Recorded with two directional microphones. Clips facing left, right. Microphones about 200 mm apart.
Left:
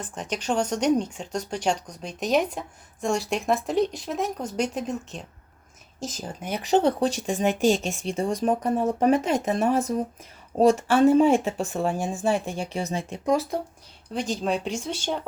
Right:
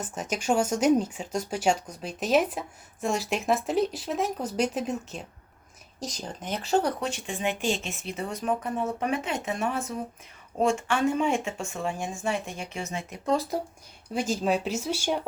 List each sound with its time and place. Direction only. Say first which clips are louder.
0.0 s speech: even; 5° right (ahead or behind); by 6.9 s 20° left (ahead or behind)
7.0 s speech: left 7 dB; 40° left (ahead or behind)
8.1 s speech: left 5 dB; 30° left (ahead or behind)
13.3 s speech: left 2 dB; centre (ahead or behind)